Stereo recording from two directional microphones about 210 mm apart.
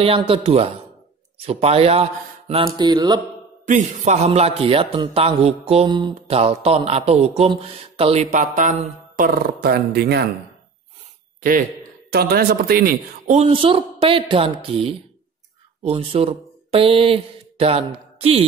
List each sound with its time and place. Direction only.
0.0 s a man's voice: 25° right (ahead or behind)
3.6 s a man's voice: 35° right (ahead or behind); by 10.2 s 50° right (ahead or behind)
12.1 s speech: 50° right (ahead or behind)
13.4 s a man's voice: 25° right (ahead or behind)